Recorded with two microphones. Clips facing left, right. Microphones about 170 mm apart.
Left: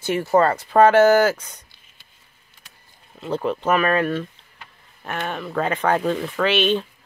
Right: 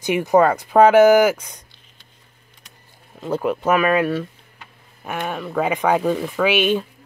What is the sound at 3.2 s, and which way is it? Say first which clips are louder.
Speech: right 2 dB; 10° right (ahead or behind).